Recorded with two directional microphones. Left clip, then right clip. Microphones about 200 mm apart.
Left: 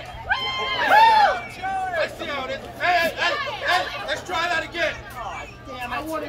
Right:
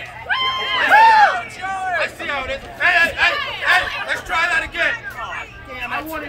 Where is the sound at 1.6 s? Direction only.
10° left (ahead or behind).